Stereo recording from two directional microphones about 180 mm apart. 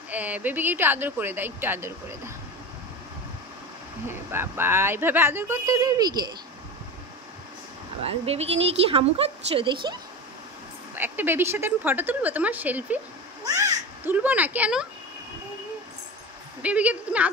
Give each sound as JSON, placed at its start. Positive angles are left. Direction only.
{"t": 0.1, "sound": "speech", "side_deg": -10}
{"t": 4.1, "sound": "speech", "side_deg": -15}
{"t": 8.0, "sound": "speech", "side_deg": -35}
{"t": 11.0, "sound": "speech", "side_deg": -10}
{"t": 13.4, "sound": "cat", "side_deg": -20}
{"t": 14.1, "sound": "speech", "side_deg": -10}
{"t": 16.6, "sound": "speech", "side_deg": -5}